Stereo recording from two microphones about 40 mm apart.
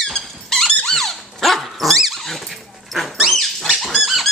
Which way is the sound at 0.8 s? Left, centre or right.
Centre.